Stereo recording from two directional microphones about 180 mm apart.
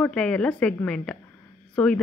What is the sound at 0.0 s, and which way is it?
A woman's voice, 5° left (ahead or behind).